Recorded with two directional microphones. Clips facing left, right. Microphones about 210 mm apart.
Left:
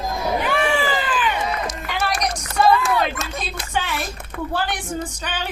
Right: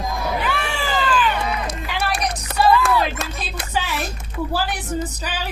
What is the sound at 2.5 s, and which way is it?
Music, 60° right (ahead or behind).